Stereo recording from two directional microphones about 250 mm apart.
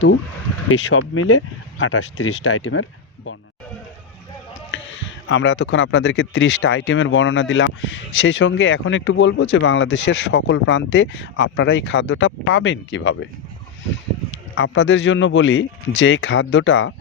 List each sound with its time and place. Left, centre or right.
0.9 s speech: left
4.7 s speech: left
14.5 s speech: left